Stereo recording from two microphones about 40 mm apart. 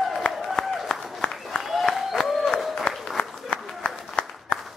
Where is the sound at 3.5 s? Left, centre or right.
Left.